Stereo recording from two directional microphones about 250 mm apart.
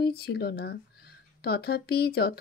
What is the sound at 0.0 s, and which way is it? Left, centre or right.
Speech, left.